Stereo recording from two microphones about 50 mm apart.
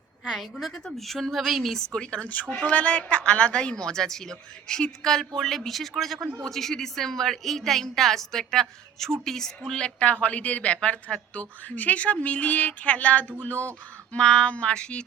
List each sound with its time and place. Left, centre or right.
0.3 s a woman's voice: centre
1.9 s a woman's voice: left
2.3 s a woman's voice: left; by 9.8 s centre
9.8 s a woman's voice: left
14.1 s a woman's voice: left